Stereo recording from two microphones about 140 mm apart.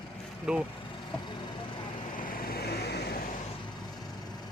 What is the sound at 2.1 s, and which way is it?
Vehicle, 80° left.